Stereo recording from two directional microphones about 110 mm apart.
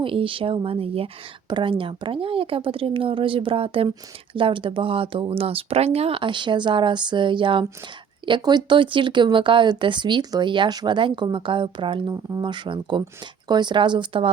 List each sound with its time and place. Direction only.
0.0 s speech: 55° right (ahead or behind)
1.5 s speech: 45° right (ahead or behind)